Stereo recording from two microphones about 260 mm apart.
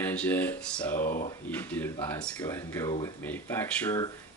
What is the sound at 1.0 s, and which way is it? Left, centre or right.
Speech, left.